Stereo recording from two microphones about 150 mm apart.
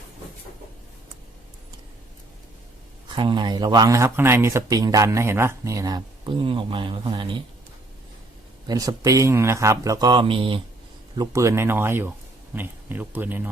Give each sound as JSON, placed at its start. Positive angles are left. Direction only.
{"t": 3.2, "sound": "speech", "side_deg": -30}
{"t": 6.2, "sound": "speech", "side_deg": -35}
{"t": 8.6, "sound": "speech", "side_deg": -25}
{"t": 11.2, "sound": "speech", "side_deg": -20}